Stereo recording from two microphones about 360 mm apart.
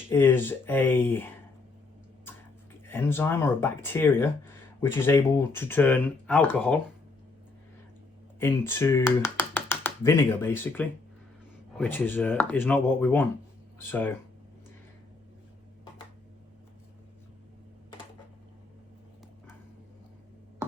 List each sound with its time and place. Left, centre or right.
0.1 s speech: centre
2.8 s speech: centre
8.4 s speech: centre